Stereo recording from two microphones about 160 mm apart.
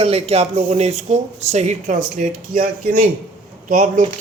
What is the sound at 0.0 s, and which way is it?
Speech, 40° right (ahead or behind).